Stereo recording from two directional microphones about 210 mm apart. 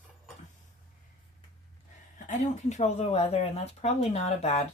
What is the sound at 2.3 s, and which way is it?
Speech, 35° left (ahead or behind).